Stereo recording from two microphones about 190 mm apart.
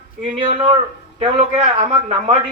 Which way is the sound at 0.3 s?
25° right (ahead or behind).